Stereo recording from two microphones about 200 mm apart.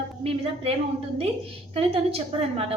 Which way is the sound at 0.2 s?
30° right (ahead or behind).